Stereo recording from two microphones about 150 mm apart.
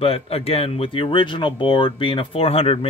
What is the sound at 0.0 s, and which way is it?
Speech, 40° left (ahead or behind).